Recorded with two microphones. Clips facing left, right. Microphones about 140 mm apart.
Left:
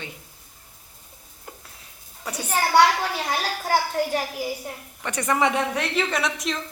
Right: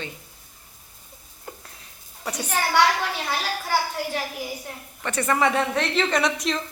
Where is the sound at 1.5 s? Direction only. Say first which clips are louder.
Right 3 dB; centre (ahead or behind).